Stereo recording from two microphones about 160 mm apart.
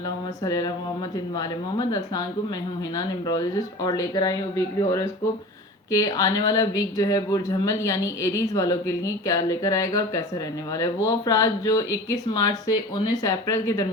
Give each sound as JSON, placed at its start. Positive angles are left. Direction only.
{"t": 0.4, "sound": "speech", "side_deg": 20}
{"t": 3.2, "sound": "speech", "side_deg": 25}